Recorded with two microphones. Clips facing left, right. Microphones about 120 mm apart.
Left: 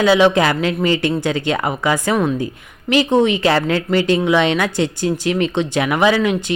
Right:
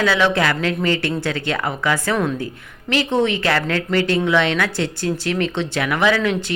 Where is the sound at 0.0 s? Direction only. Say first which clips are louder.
Left 5 dB; 20° left (ahead or behind).